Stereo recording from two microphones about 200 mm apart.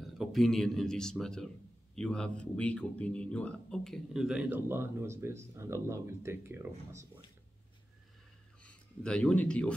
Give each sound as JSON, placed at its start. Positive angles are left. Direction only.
{"t": 0.0, "sound": "speech", "side_deg": 0}
{"t": 8.6, "sound": "speech", "side_deg": 5}